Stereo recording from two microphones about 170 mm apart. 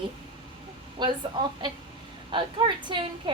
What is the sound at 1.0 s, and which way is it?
Speech, 25° right (ahead or behind).